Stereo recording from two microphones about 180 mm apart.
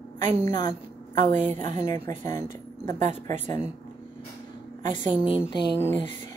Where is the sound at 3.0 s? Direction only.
40° right (ahead or behind).